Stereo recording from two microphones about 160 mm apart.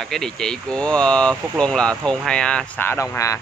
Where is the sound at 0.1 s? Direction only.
5° left (ahead or behind).